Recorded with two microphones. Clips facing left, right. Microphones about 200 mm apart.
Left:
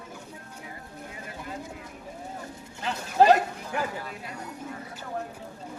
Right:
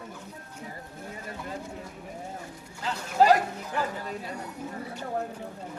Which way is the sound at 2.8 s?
20° left (ahead or behind).